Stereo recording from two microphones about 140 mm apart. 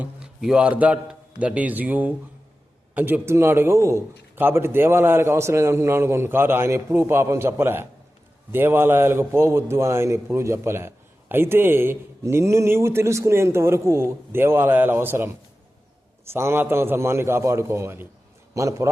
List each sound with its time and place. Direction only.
0.0 s a man's voice: 5° right (ahead or behind); by 18.9 s 20° right (ahead or behind)